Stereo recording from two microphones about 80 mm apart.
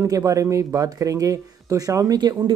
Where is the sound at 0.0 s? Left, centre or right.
Right.